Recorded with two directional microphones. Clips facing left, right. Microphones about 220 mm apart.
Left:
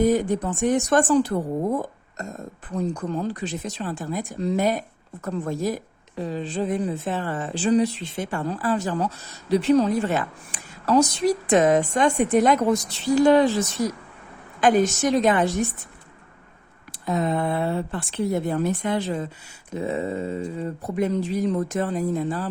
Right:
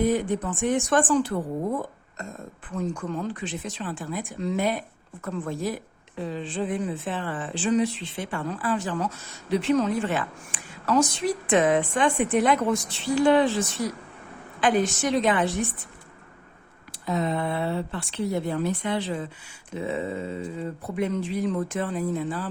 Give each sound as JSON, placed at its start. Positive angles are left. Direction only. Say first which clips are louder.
{"t": 0.0, "sound": "a woman's voice", "louder": "left 3 dB", "side_deg": 40}
{"t": 17.1, "sound": "a woman's voice", "louder": "left 3 dB", "side_deg": 50}